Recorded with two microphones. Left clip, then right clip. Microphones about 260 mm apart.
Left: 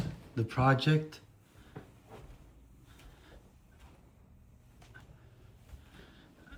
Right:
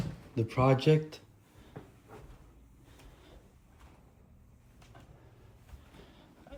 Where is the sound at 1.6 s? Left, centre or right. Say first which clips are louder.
Right 1 dB; centre.